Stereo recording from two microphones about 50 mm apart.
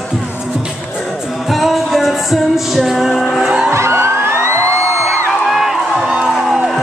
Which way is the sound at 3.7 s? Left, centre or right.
Right.